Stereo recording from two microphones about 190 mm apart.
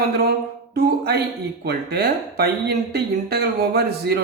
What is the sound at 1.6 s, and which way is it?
Speech, 55° right (ahead or behind).